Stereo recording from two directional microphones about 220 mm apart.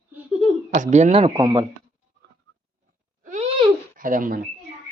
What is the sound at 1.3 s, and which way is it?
Speech, 15° right (ahead or behind).